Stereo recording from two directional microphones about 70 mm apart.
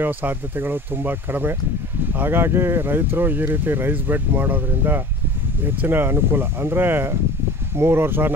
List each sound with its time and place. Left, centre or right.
0.0 s speech: right